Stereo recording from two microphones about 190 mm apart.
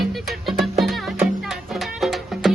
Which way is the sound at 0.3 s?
Centre (ahead or behind).